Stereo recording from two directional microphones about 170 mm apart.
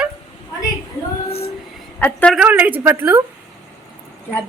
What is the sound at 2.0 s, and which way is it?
Speech, 10° left (ahead or behind).